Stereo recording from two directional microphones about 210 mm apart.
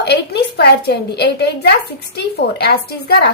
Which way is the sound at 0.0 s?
50° left (ahead or behind).